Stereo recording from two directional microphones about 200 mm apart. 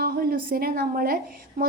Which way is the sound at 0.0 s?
50° right (ahead or behind).